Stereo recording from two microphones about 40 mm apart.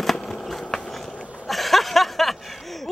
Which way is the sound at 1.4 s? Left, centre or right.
Centre.